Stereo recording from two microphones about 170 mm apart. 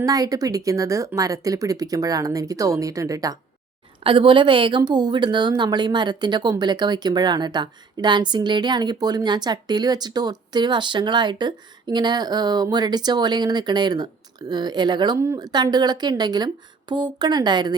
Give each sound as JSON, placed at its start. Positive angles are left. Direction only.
{"t": 0.0, "sound": "a woman's voice", "side_deg": -20}
{"t": 4.0, "sound": "a woman's voice", "side_deg": -30}